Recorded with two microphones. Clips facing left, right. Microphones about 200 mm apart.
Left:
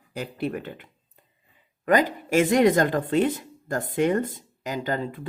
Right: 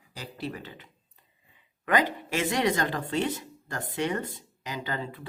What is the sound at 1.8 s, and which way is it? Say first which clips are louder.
Speech: left 5 dB; 45° left (ahead or behind).